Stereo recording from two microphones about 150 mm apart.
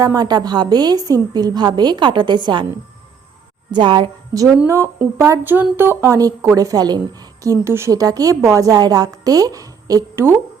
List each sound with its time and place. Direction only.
0.0 s a woman's voice: 25° right (ahead or behind)
3.7 s a woman's voice: 30° right (ahead or behind)
4.5 s a woman's voice: 15° right (ahead or behind)